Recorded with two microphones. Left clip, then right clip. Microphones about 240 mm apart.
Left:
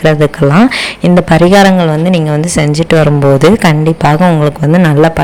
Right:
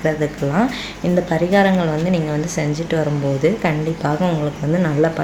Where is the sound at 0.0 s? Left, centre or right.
Left.